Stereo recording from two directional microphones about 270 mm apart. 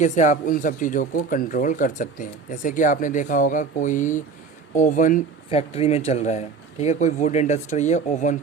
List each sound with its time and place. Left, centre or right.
0.0 s speech: left